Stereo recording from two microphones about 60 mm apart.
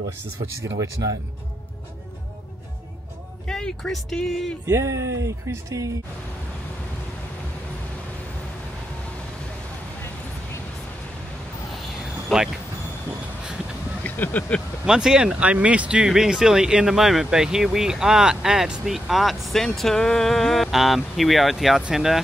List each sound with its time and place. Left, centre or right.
0.6 s speech: right
3.4 s speech: centre
4.6 s speech: right
12.3 s speech: centre
14.0 s vehicle: left
14.9 s speech: centre
16.1 s speech: centre